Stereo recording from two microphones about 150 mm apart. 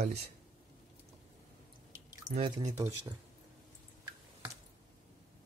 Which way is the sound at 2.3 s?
35° right (ahead or behind).